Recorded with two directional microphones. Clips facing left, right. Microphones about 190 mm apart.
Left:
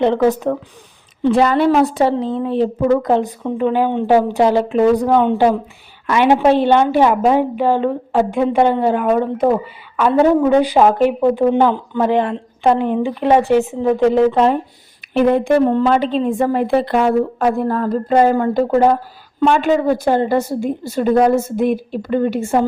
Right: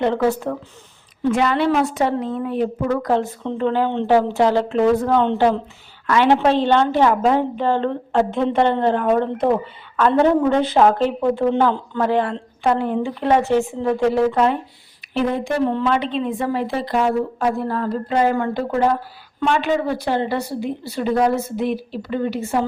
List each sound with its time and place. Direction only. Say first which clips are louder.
0.0 s speech: left 4 dB; 20° left (ahead or behind)
1.2 s speech: left 5 dB; 35° left (ahead or behind)
15.1 s a woman's voice: left 7 dB; 55° left (ahead or behind)